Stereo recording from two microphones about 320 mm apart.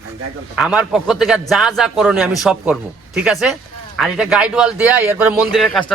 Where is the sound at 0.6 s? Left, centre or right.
Centre.